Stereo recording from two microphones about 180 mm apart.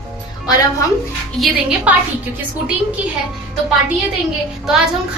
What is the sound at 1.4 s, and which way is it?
Speech, centre (ahead or behind).